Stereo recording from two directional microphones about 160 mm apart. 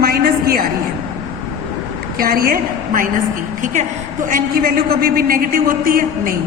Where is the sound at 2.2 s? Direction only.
65° right (ahead or behind).